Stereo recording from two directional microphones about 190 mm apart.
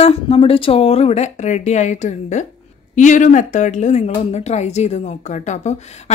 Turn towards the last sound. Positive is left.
turn(degrees=35)  # may be behind; listen again after turning